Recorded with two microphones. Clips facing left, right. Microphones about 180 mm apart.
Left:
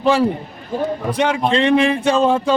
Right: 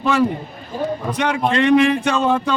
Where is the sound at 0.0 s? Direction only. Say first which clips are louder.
Left 2 dB; 30° left (ahead or behind).